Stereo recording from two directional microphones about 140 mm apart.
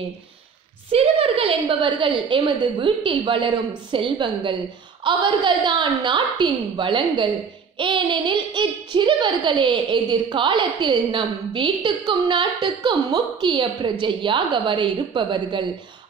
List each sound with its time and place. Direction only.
0.9 s a child's voice: 45° right (ahead or behind)